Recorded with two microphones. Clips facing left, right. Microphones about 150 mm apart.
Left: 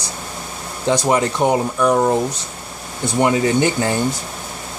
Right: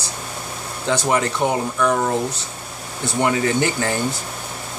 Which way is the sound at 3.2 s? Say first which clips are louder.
Left 3 dB; 20° left (ahead or behind).